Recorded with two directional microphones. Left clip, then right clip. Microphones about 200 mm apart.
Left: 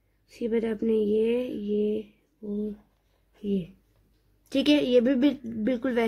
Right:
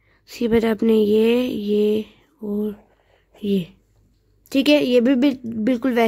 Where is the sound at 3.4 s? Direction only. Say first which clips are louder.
Right 8 dB; 55° right (ahead or behind).